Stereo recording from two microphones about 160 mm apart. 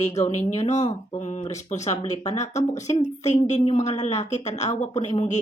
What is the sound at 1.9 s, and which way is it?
Speech, 25° left (ahead or behind).